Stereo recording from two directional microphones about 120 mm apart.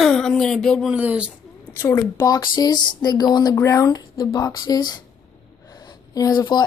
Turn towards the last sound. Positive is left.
turn(degrees=35)  # may be behind; listen again after turning